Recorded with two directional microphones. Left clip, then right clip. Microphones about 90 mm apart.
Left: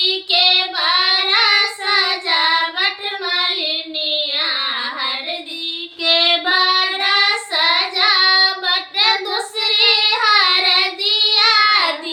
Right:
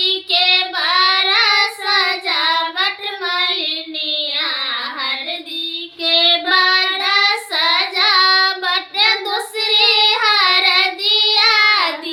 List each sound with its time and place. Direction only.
0.0 s child singing: 40° right (ahead or behind)
6.0 s child singing: 20° left (ahead or behind)
6.5 s child singing: 40° right (ahead or behind)